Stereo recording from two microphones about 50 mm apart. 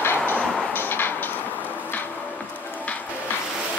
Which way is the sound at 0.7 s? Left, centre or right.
Left.